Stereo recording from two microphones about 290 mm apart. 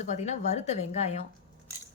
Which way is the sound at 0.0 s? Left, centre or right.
Left.